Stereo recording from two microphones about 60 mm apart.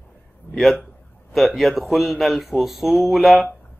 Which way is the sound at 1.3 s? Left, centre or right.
Centre.